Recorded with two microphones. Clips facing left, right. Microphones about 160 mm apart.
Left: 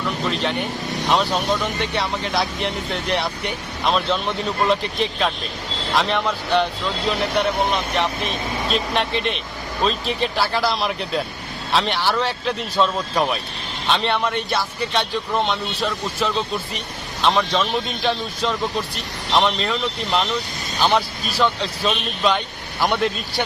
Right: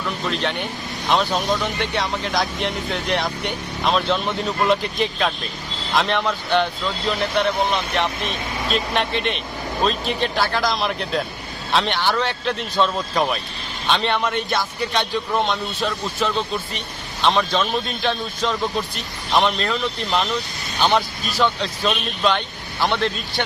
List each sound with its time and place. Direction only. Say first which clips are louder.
0.3 s speech: even; centre (ahead or behind)